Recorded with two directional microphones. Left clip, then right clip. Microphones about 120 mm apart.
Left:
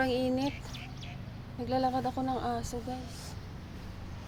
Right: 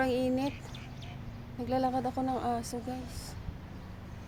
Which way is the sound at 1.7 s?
20° right (ahead or behind).